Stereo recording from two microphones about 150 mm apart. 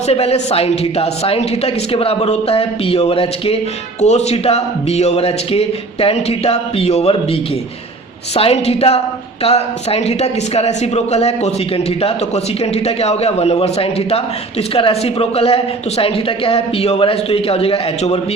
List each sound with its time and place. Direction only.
0.1 s a woman's voice: 45° left (ahead or behind)
8.4 s a woman's voice: 40° left (ahead or behind)